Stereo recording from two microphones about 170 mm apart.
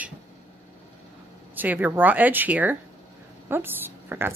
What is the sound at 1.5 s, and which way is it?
A woman's voice, 10° right (ahead or behind).